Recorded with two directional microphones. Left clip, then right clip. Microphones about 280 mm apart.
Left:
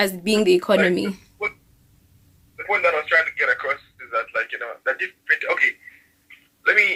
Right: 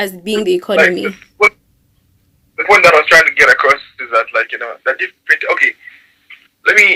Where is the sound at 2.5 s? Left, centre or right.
Right.